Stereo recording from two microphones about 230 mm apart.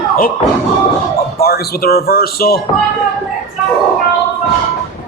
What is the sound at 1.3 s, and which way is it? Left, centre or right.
Speech, left.